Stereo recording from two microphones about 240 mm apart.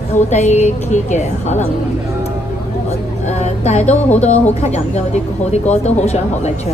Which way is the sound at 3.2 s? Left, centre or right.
Left.